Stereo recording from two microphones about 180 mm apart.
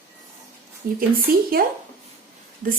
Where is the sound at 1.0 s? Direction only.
55° right (ahead or behind).